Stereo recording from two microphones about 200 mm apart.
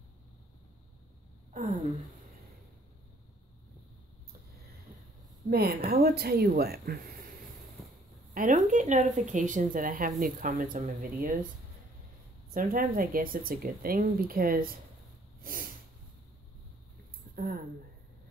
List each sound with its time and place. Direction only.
1.5 s a sound: 40° right (ahead or behind)
5.5 s speech: 50° right (ahead or behind)
8.4 s speech: 40° right (ahead or behind)
12.5 s speech: 45° right (ahead or behind)
15.4 s snort: 45° right (ahead or behind)
17.4 s speech: 50° right (ahead or behind)